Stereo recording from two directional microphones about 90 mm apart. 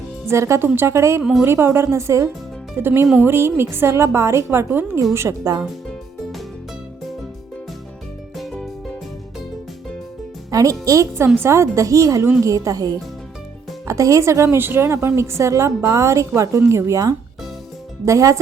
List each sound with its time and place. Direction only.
0.3 s a woman's voice: 35° right (ahead or behind)
8.4 s music: centre (ahead or behind)
10.5 s a woman's voice: 35° right (ahead or behind)